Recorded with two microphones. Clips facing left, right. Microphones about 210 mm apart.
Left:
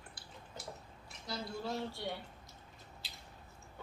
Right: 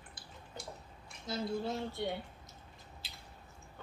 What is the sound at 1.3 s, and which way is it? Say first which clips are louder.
Speech: right 4 dB; 20° right (ahead or behind).